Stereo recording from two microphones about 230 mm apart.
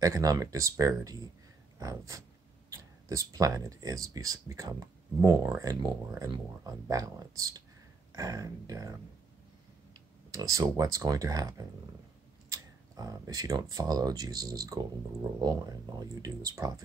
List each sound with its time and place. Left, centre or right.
0.0 s speech: centre
10.3 s speech: centre